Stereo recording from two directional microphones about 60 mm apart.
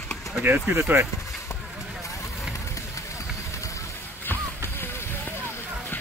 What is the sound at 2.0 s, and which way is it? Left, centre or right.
Vehicle, left.